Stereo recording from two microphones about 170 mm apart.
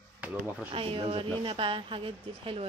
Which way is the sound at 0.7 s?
35° right (ahead or behind).